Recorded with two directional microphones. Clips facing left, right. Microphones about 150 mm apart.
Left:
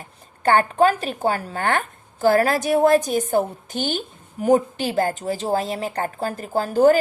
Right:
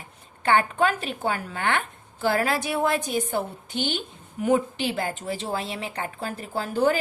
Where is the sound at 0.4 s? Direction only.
40° left (ahead or behind).